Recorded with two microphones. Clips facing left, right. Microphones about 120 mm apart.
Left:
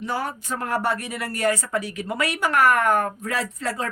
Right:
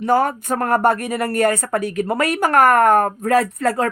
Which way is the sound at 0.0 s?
50° right (ahead or behind).